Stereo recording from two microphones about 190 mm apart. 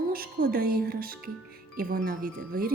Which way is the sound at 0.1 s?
50° right (ahead or behind).